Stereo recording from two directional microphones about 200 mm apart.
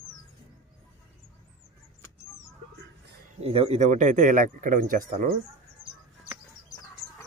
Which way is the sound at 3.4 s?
30° right (ahead or behind).